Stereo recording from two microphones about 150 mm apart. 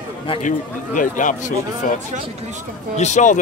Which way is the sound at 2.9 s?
50° left (ahead or behind).